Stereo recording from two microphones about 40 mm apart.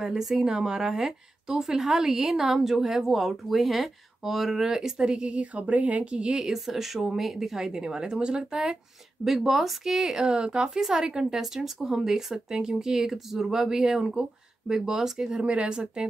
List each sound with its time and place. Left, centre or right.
0.0 s speech: centre
5.3 s speech: right; by 6.6 s centre
6.6 s speech: centre
15.4 s speech: right